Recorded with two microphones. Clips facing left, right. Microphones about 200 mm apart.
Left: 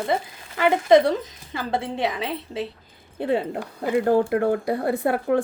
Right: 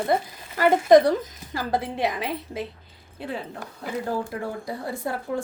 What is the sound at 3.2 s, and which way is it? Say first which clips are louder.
A woman's voice: left 9 dB; 65° left (ahead or behind).